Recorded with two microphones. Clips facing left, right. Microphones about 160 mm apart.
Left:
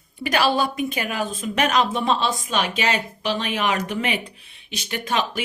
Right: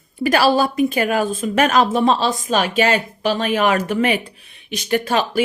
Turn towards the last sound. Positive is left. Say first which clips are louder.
# right 6 dB
turn(degrees=-50)  # may be behind; listen again after turning